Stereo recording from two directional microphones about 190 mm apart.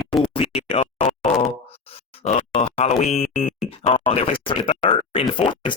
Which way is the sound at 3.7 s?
30° left (ahead or behind).